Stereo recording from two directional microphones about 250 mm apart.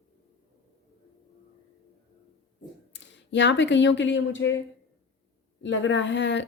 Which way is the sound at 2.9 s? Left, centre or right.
Left.